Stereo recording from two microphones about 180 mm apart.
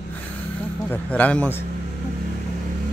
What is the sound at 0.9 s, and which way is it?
Speech, 10° left (ahead or behind).